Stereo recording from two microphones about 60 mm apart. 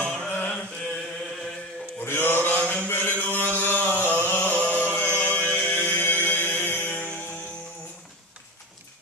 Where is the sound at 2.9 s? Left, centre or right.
Left.